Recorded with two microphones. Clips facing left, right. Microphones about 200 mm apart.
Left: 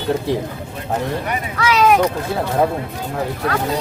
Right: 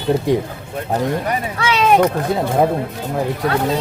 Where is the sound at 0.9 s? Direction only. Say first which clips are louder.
Right 2 dB; 30° right (ahead or behind).